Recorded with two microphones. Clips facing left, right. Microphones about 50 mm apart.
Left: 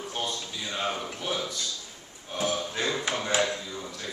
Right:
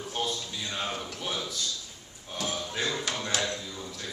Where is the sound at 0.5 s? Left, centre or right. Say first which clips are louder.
Left 1 dB; centre.